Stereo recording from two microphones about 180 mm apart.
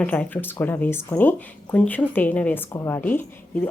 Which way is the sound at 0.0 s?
10° left (ahead or behind).